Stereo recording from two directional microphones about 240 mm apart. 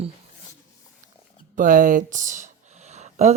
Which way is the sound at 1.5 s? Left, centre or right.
Right.